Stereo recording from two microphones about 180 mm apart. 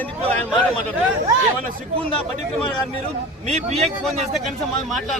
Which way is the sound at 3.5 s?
40° right (ahead or behind).